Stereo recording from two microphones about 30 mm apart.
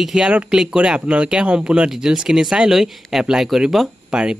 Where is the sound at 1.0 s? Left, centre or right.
Right.